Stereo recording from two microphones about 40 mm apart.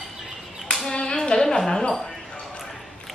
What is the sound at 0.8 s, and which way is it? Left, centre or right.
A child's voice, left.